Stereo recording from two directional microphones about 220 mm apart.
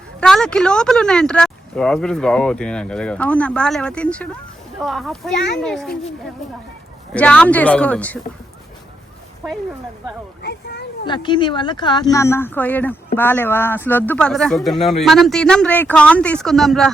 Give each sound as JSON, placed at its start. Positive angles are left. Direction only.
{"t": 0.2, "sound": "speech", "side_deg": 5}
{"t": 7.1, "sound": "speech", "side_deg": 5}
{"t": 11.0, "sound": "speech", "side_deg": 20}